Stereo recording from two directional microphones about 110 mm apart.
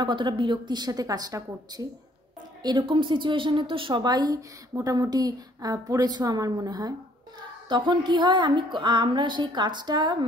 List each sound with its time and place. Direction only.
0.0 s a woman's voice: 45° right (ahead or behind)
2.6 s a woman's voice: 45° right (ahead or behind)
7.6 s a woman's voice: 45° right (ahead or behind)